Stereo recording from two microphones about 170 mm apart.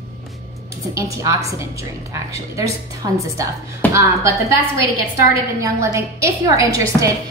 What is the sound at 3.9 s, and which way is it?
A woman's voice, 15° right (ahead or behind).